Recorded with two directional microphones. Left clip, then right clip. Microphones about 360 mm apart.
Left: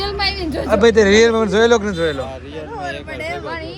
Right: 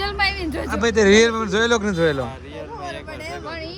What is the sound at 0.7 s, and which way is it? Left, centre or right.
Speech, centre.